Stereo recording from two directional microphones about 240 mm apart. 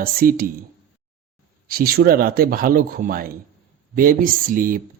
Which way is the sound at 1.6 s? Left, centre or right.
Right.